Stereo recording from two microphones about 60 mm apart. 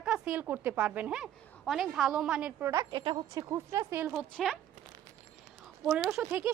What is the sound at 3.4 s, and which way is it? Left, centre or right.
Speech, right.